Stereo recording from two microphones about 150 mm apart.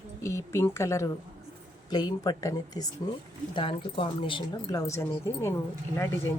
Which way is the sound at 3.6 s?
35° left (ahead or behind).